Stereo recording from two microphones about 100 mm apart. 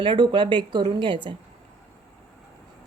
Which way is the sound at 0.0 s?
50° right (ahead or behind).